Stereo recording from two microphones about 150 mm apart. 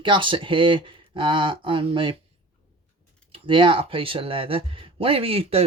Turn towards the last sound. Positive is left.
turn(degrees=-40)  # may be behind; listen again after turning